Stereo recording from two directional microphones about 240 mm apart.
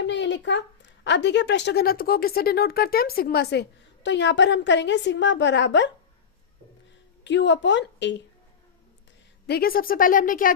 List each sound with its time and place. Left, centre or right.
0.0 s a woman's voice: left
7.3 s a woman's voice: left
9.5 s speech: left